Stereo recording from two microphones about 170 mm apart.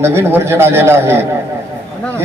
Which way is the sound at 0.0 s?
15° right (ahead or behind).